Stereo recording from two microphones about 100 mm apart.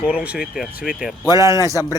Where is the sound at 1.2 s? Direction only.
35° right (ahead or behind).